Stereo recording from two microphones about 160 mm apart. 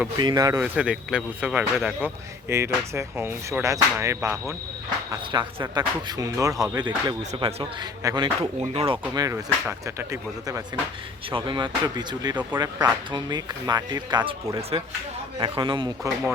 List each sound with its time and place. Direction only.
0.2 s speech: 25° right (ahead or behind)
0.6 s speech: 5° right (ahead or behind)
2.5 s speech: 15° right (ahead or behind)
8.7 s speech: 35° right (ahead or behind)
9.1 s speech: 20° right (ahead or behind)
11.3 s speech: 30° right (ahead or behind)